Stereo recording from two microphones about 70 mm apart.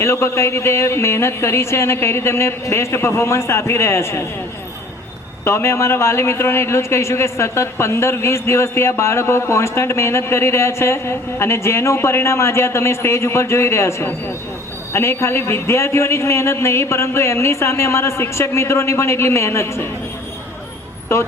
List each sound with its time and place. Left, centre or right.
0.0 s speech: left
5.5 s speech: left
21.1 s speech: left